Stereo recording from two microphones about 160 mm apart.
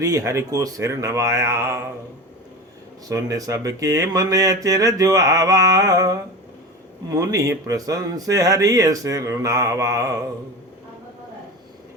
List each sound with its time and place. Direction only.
0.0 s speech: 20° right (ahead or behind)
3.1 s speech: 20° right (ahead or behind)